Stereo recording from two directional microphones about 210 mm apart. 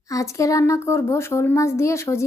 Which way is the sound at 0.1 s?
15° left (ahead or behind).